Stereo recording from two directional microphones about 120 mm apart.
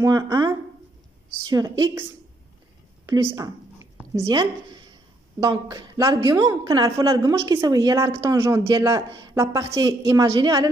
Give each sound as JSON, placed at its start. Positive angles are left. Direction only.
{"t": 0.0, "sound": "speech", "side_deg": -30}
{"t": 1.5, "sound": "speech", "side_deg": -30}
{"t": 3.1, "sound": "a woman's voice", "side_deg": -25}
{"t": 4.3, "sound": "a woman's voice", "side_deg": -40}